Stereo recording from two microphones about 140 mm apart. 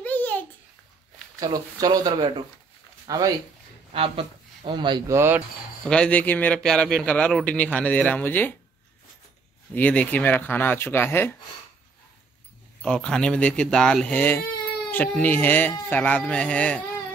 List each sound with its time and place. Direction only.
0.0 s babbling: 10° left (ahead or behind)
1.4 s speech: 25° right (ahead or behind)
3.9 s speech: 40° right (ahead or behind)
5.1 s speech: 15° right (ahead or behind)
5.9 s a man's voice: 10° left (ahead or behind)
9.8 s a man's voice: 10° left (ahead or behind)
12.8 s a man's voice: 5° left (ahead or behind)